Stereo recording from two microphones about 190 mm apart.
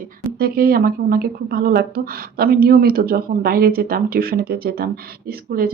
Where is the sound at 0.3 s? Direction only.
50° right (ahead or behind).